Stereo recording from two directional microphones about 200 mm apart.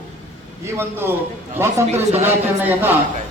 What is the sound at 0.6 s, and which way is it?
Speech, 10° right (ahead or behind).